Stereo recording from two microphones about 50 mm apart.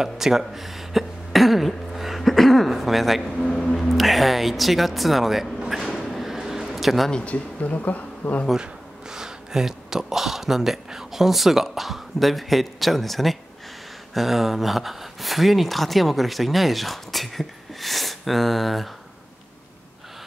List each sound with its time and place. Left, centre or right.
0.0 s speech: centre
2.0 s a sound: centre
3.3 s a man's voice: centre
3.7 s speech: centre
5.7 s a sound: centre
7.1 s speech: centre
7.6 s speech: left
9.1 s speech: centre